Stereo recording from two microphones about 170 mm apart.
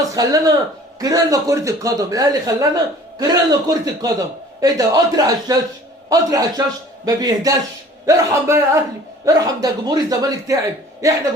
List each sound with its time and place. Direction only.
0.0 s a man's voice: 20° right (ahead or behind)